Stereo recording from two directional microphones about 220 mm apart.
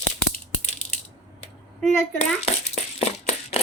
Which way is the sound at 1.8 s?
5° left (ahead or behind).